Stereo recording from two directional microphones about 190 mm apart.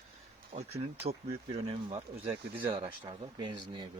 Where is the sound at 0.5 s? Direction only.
40° right (ahead or behind).